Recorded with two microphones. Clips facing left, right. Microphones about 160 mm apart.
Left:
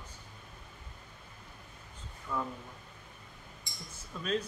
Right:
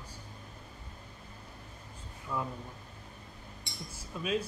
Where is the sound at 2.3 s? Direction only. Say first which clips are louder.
Even; 10° right (ahead or behind).